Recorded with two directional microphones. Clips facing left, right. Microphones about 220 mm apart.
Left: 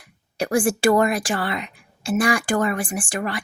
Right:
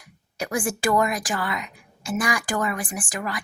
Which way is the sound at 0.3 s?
30° left (ahead or behind).